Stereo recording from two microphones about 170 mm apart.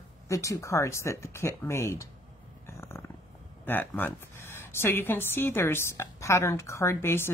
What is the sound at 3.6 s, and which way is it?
Speech, 10° left (ahead or behind).